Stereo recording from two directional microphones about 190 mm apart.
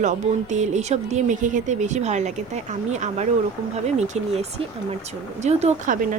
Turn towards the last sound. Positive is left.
turn(degrees=-35)  # may be behind; listen again after turning